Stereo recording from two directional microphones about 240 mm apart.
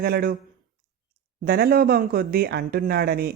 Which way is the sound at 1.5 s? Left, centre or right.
Right.